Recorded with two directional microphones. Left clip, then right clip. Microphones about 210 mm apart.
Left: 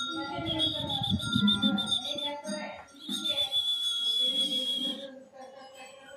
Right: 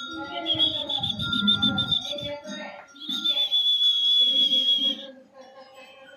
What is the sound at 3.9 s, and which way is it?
Fire alarm, 5° left (ahead or behind).